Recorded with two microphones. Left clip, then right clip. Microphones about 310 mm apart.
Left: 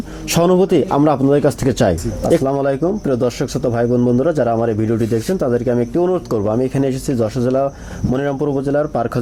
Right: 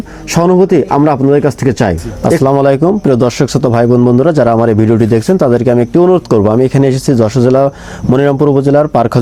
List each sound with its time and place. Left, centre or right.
0.3 s speech: right
2.4 s a man's voice: right